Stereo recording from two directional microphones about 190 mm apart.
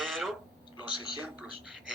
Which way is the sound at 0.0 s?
Centre (ahead or behind).